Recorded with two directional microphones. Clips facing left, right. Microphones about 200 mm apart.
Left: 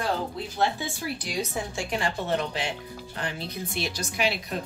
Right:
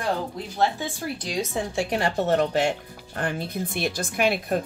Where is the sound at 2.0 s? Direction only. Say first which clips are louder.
Right 5 dB; 40° right (ahead or behind).